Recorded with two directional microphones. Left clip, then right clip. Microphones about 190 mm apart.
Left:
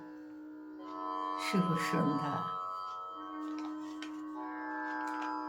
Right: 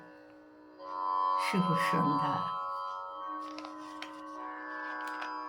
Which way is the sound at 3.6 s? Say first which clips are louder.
Left 1 dB; 45° right (ahead or behind).